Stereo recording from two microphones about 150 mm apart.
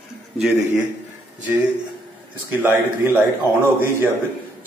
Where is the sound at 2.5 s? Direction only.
15° right (ahead or behind).